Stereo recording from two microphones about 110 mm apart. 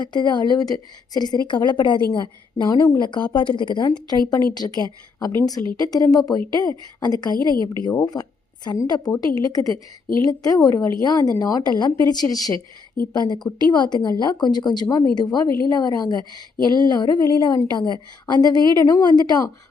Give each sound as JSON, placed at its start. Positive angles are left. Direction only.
{"t": 0.0, "sound": "a woman's voice", "side_deg": 40}
{"t": 7.3, "sound": "a woman's voice", "side_deg": -40}
{"t": 8.0, "sound": "a woman's voice", "side_deg": 40}